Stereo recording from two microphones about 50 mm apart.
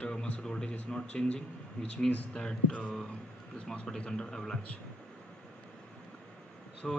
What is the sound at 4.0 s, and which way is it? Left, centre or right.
Speech, centre.